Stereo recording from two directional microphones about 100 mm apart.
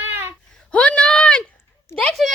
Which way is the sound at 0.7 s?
10° left (ahead or behind).